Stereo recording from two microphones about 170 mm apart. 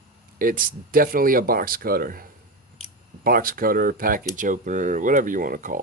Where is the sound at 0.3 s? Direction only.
55° right (ahead or behind).